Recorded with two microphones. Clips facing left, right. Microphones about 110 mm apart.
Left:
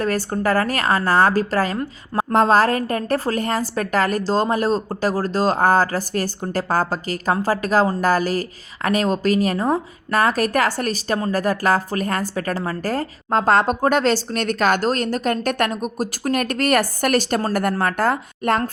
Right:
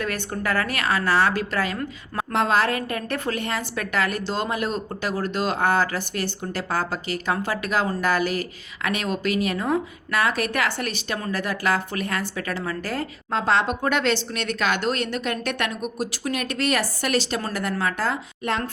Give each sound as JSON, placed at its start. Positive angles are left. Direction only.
{"t": 0.0, "sound": "a woman's voice", "side_deg": 35}